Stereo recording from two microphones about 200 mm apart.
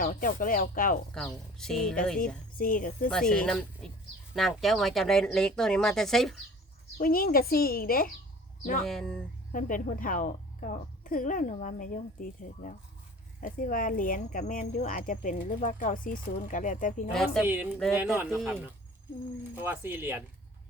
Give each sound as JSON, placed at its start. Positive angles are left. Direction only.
{"t": 0.0, "sound": "speech", "side_deg": 45}
{"t": 1.2, "sound": "speech", "side_deg": 5}
{"t": 2.1, "sound": "speech", "side_deg": 45}
{"t": 3.1, "sound": "speech", "side_deg": 5}
{"t": 7.0, "sound": "speech", "side_deg": 45}
{"t": 8.8, "sound": "speech", "side_deg": 0}
{"t": 9.5, "sound": "speech", "side_deg": 40}
{"t": 17.1, "sound": "speech", "side_deg": 0}
{"t": 17.4, "sound": "speech", "side_deg": -10}
{"t": 19.5, "sound": "speech", "side_deg": -10}